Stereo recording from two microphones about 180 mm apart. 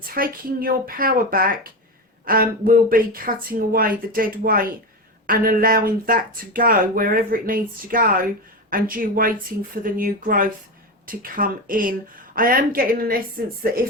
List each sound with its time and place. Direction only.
0.0 s speech: 55° right (ahead or behind)